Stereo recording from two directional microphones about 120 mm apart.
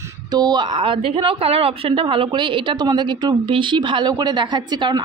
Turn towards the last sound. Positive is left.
turn(degrees=-40)  # may be behind; listen again after turning